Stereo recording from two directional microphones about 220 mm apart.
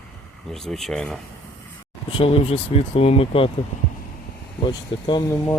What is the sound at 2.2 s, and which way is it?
Speech, 25° left (ahead or behind).